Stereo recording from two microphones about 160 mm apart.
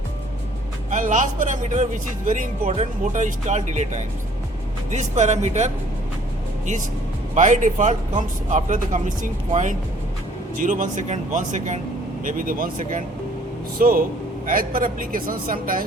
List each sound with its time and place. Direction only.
0.9 s speech: 50° right (ahead or behind)
7.3 s speech: 50° right (ahead or behind)